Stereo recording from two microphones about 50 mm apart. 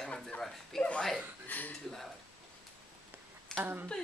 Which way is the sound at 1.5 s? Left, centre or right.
Left.